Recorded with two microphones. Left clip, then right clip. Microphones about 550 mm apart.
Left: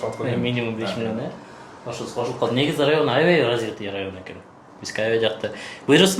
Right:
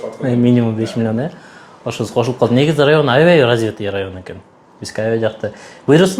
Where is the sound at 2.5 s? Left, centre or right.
Right.